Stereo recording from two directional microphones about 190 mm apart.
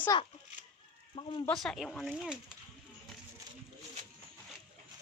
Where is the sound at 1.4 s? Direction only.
Centre (ahead or behind).